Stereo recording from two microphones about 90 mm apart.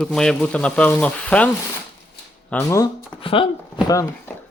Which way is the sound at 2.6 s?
35° left (ahead or behind).